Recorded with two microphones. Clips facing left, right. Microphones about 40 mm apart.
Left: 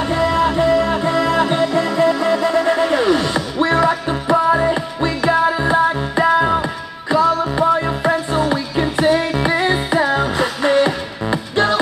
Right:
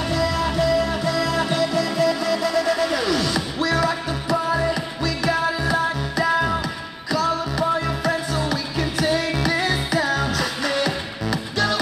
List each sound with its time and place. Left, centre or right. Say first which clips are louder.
0.1 s music: left 7 dB; left